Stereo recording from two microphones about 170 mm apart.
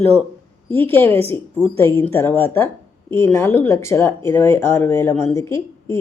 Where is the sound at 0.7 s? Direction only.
10° left (ahead or behind).